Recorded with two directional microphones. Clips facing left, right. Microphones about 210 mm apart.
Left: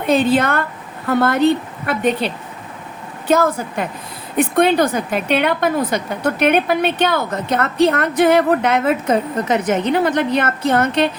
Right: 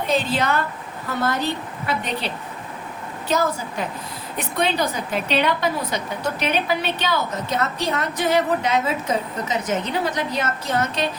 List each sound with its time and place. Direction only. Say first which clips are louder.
0.1 s a woman's voice: left 7 dB; 55° left (ahead or behind)
3.2 s a woman's voice: left 6 dB; 55° left (ahead or behind)